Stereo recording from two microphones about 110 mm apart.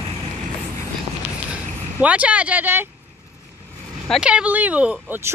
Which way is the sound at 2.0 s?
10° right (ahead or behind).